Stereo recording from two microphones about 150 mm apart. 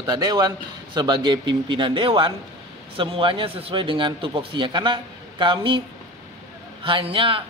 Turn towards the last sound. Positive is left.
turn(degrees=-35)  # may be behind; listen again after turning